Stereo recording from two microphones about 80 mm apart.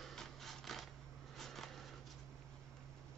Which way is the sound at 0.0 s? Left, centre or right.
Centre.